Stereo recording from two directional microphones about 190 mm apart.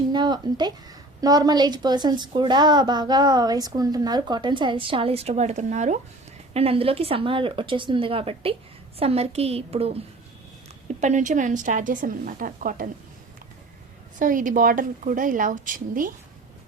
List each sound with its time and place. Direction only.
0.1 s a sound: 25° right (ahead or behind)
1.2 s a woman's voice: 20° right (ahead or behind)
11.0 s a woman's voice: 40° right (ahead or behind)
14.2 s a woman's voice: 45° right (ahead or behind)